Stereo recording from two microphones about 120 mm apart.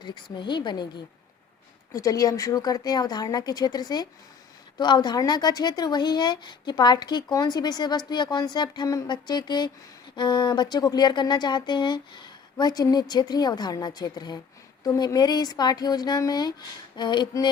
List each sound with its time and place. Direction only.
0.0 s speech: 40° left (ahead or behind)